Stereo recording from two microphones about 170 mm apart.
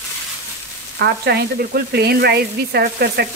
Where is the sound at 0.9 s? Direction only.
70° right (ahead or behind).